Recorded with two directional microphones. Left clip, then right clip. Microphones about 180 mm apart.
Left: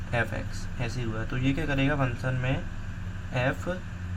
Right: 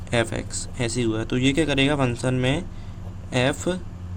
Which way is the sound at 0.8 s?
55° right (ahead or behind).